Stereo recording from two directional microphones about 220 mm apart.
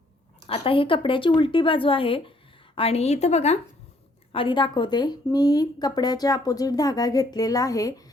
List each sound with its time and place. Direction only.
0.4 s speech: 25° left (ahead or behind)